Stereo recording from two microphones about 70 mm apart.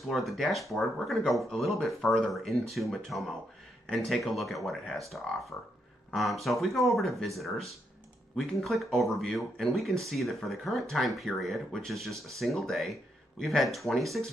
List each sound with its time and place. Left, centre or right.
0.1 s speech: centre
5.5 s speech: left
6.1 s speech: centre